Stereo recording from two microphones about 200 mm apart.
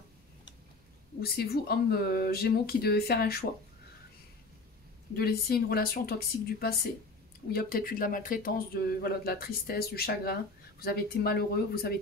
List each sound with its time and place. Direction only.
1.2 s speech: 50° left (ahead or behind)
5.1 s speech: 50° left (ahead or behind)